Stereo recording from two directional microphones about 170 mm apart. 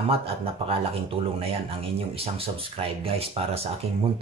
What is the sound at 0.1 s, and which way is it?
Speech, 35° right (ahead or behind).